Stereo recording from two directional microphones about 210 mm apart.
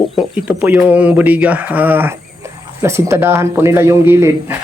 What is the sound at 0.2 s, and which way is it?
A man's voice, 5° right (ahead or behind).